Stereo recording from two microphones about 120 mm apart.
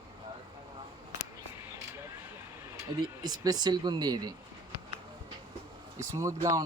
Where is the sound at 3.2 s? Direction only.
35° right (ahead or behind).